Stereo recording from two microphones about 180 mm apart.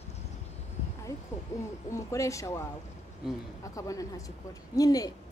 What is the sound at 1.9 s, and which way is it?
Speech, 15° left (ahead or behind).